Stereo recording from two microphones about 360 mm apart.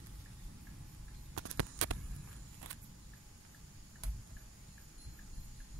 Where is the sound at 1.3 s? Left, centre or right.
Right.